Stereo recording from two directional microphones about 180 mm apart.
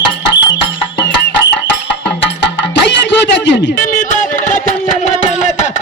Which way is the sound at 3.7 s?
50° left (ahead or behind).